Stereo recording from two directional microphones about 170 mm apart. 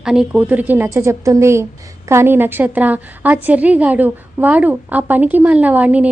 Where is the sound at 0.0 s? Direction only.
5° right (ahead or behind).